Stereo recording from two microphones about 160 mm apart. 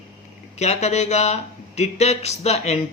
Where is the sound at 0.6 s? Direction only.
45° left (ahead or behind).